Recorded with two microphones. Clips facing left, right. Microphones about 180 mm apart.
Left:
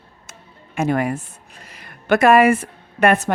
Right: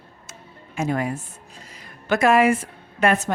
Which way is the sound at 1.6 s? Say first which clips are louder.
Left 5 dB; 65° left (ahead or behind).